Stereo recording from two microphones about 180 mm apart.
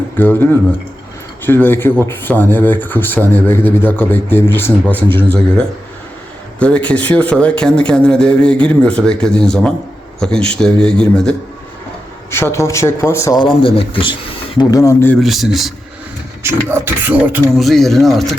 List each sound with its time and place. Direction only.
0.2 s speech: 10° left (ahead or behind)
1.5 s speech: 10° left (ahead or behind)
15.2 s speech: centre (ahead or behind)
16.4 s speech: 15° right (ahead or behind)